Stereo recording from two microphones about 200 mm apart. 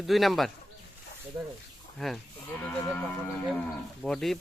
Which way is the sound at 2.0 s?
Centre (ahead or behind).